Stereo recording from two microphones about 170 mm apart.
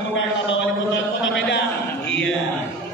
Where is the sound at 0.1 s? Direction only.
90° left.